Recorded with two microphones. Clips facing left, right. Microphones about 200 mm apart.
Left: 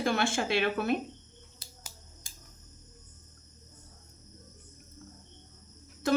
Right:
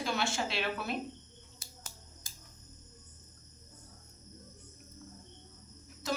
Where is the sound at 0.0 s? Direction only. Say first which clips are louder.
Left 5 dB; 55° left (ahead or behind).